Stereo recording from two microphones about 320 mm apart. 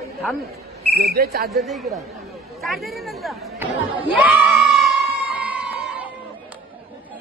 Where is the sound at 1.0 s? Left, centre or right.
Right.